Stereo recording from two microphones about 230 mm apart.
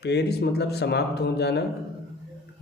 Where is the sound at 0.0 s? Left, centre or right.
Left.